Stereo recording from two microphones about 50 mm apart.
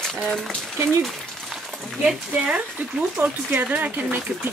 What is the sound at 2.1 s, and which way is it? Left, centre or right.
Speech, right.